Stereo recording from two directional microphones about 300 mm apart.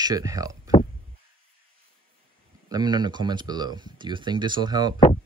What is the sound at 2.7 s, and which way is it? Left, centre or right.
Speech, centre.